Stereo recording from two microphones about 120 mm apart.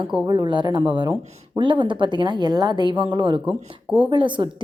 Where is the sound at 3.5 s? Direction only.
15° right (ahead or behind).